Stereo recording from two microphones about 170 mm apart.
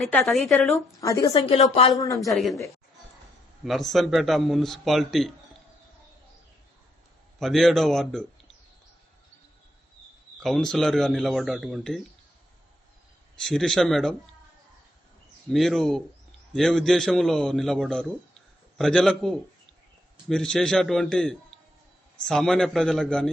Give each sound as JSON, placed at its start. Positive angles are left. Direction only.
{"t": 0.0, "sound": "a man's voice", "side_deg": 0}
{"t": 1.0, "sound": "a woman's voice", "side_deg": 20}
{"t": 1.4, "sound": "speech", "side_deg": 35}
{"t": 1.9, "sound": "a woman's voice", "side_deg": 20}
{"t": 2.3, "sound": "a man's voice", "side_deg": 0}
{"t": 3.6, "sound": "a man's voice", "side_deg": 0}
{"t": 7.3, "sound": "a man's voice", "side_deg": 0}
{"t": 10.4, "sound": "a man's voice", "side_deg": 0}
{"t": 13.4, "sound": "a man's voice", "side_deg": 0}
{"t": 15.4, "sound": "a man's voice", "side_deg": 0}